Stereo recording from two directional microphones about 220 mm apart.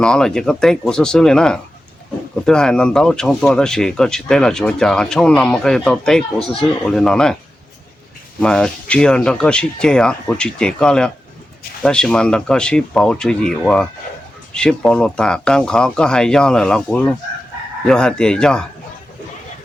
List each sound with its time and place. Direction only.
0.0 s speech: 5° left (ahead or behind)
8.4 s speech: 5° left (ahead or behind)